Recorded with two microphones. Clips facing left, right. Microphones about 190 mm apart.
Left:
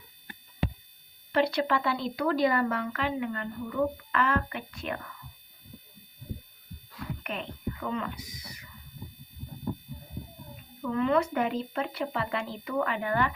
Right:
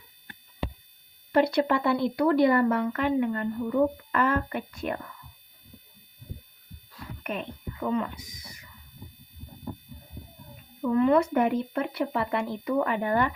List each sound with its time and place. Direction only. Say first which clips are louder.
1.3 s a woman's voice: right 3 dB; 50° right (ahead or behind)
7.8 s speech: right 7 dB; 40° right (ahead or behind)
10.9 s a woman's voice: right 4 dB; 50° right (ahead or behind)